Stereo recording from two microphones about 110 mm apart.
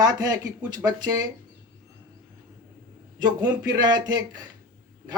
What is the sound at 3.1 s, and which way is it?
Speech, 40° right (ahead or behind).